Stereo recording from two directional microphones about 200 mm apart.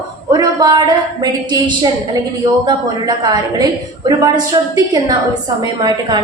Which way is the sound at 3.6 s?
20° right (ahead or behind).